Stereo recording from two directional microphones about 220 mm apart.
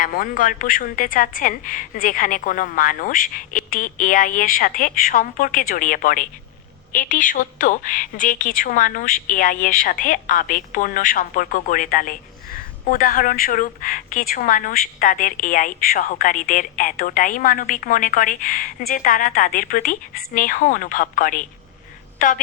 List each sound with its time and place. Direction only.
0.0 s a woman's voice: 40° left (ahead or behind)